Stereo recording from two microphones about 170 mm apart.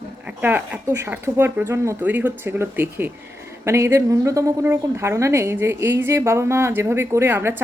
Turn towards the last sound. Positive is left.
turn(degrees=-15)  # may be behind; listen again after turning